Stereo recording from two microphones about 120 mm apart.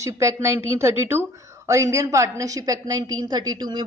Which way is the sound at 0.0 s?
25° right (ahead or behind).